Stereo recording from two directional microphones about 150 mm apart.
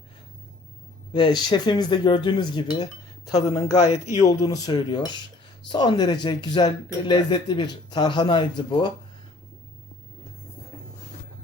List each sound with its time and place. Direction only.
1.1 s speech: 30° left (ahead or behind)